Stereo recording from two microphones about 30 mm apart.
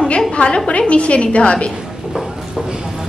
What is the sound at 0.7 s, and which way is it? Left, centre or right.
A woman's voice, left.